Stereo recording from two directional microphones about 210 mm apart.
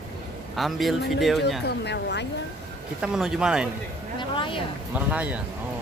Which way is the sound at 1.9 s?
55° left (ahead or behind).